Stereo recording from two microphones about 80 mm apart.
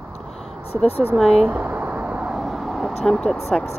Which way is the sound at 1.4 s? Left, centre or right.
Right.